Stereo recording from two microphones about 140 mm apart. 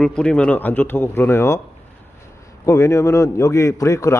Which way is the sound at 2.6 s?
20° left (ahead or behind).